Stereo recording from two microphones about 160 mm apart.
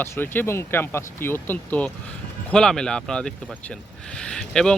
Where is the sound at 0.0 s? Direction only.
15° left (ahead or behind).